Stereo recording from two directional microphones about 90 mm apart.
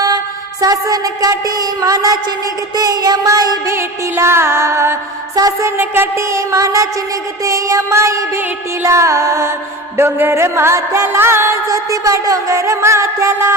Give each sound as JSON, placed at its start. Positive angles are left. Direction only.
{"t": 0.6, "sound": "music", "side_deg": -40}
{"t": 3.7, "sound": "music", "side_deg": -30}
{"t": 5.3, "sound": "music", "side_deg": -45}